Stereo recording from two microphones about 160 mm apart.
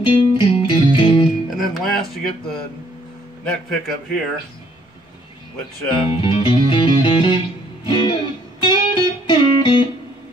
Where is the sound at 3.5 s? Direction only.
5° left (ahead or behind).